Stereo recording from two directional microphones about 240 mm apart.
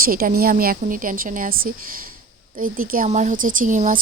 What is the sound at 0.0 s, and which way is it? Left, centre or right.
A woman's voice, right.